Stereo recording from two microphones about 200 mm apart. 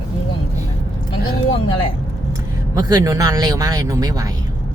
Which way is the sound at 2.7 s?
20° right (ahead or behind).